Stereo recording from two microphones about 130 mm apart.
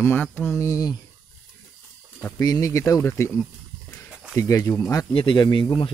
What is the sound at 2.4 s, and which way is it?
Speech, 25° left (ahead or behind).